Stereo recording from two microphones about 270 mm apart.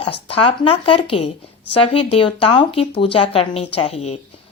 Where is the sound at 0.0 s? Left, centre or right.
Left.